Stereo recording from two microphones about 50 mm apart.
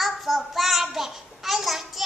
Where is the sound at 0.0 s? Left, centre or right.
Centre.